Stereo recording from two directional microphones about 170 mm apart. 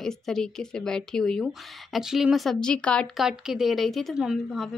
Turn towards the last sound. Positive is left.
turn(degrees=0)  # may be behind; listen again after turning